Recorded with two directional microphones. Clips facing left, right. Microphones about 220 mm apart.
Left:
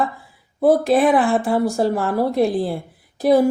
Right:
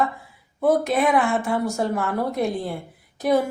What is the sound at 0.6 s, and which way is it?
Speech, 35° left (ahead or behind).